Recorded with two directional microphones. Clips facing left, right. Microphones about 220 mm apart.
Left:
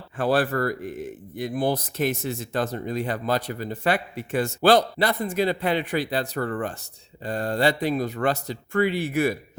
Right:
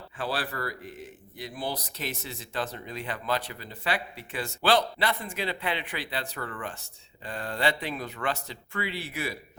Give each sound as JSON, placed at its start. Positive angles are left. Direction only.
{"t": 0.2, "sound": "speech", "side_deg": 50}